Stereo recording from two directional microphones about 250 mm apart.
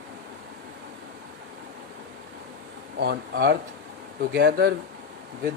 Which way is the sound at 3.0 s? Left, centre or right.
Right.